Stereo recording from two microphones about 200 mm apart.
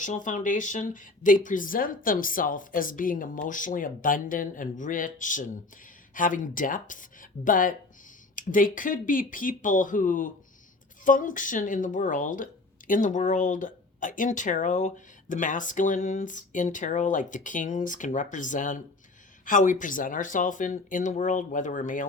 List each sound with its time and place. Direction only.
0.0 s speech: 40° left (ahead or behind)